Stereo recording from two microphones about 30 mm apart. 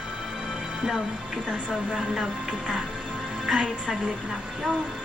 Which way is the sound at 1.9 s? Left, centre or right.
Right.